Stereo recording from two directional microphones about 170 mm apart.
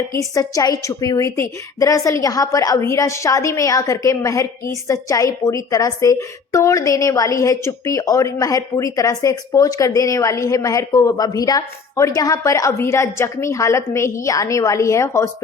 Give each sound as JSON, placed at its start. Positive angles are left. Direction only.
{"t": 0.1, "sound": "a woman's voice", "side_deg": 20}